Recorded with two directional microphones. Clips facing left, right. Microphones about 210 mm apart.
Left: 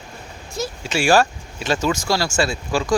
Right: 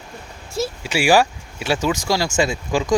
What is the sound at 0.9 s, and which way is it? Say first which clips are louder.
Speech: even; 15° right (ahead or behind).